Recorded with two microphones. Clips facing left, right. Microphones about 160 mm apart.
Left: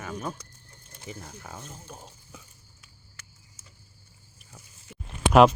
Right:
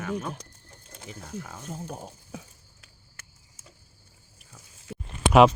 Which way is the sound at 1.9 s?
45° right (ahead or behind).